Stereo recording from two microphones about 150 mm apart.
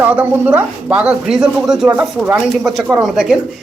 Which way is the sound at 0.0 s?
10° right (ahead or behind).